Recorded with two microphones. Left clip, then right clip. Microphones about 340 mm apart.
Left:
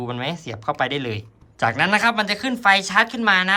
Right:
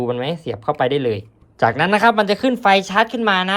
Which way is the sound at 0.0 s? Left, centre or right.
Centre.